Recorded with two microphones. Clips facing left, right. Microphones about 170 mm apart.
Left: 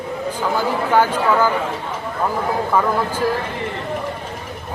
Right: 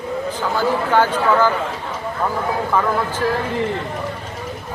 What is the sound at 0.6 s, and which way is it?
Speech, 10° left (ahead or behind).